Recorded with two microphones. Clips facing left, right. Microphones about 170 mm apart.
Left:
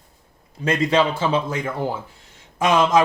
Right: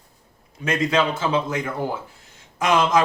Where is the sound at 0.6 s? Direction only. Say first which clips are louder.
Left 2 dB; 30° left (ahead or behind).